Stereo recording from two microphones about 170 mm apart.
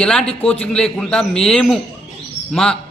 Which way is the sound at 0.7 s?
5° left (ahead or behind).